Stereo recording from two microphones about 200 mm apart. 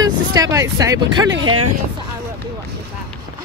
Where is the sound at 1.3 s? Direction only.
85° right.